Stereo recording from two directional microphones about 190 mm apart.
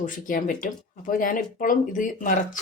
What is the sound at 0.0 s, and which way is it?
A woman's voice, 45° left (ahead or behind).